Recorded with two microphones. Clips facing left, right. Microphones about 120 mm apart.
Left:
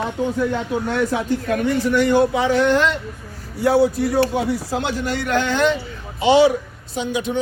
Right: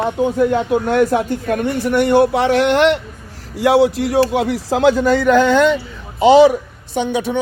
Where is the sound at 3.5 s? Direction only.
90° right.